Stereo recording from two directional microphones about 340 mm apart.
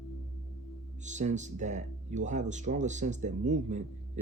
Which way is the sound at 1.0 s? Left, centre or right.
Right.